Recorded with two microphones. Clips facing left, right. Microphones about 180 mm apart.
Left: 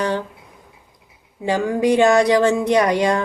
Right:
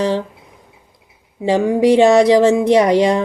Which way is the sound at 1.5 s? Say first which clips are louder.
Right 5 dB; 25° right (ahead or behind).